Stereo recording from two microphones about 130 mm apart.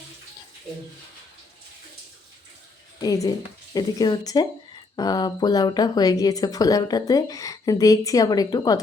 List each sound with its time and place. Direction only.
3.0 s speech: 30° left (ahead or behind)